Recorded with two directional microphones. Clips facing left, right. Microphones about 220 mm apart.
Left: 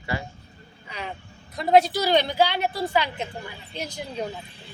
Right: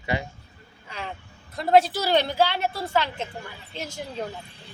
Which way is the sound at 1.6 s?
Centre (ahead or behind).